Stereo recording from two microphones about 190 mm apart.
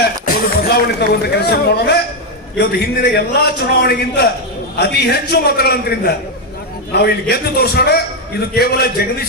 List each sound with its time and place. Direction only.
0.3 s a man's voice: 55° left (ahead or behind)